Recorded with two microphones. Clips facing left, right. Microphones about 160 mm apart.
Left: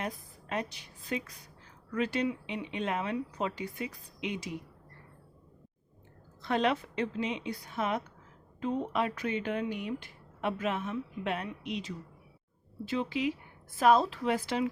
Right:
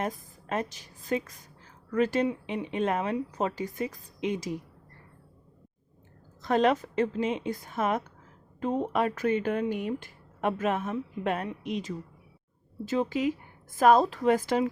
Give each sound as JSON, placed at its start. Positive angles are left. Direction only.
{"t": 0.0, "sound": "speech", "side_deg": -45}
{"t": 6.4, "sound": "speech", "side_deg": -45}